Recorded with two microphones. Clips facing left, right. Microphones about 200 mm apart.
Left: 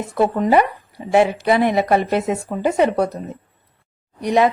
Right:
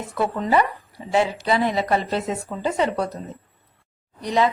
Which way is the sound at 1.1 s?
60° left (ahead or behind).